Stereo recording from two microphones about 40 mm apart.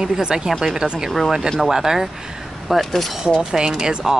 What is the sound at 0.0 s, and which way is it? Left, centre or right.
Speech, centre.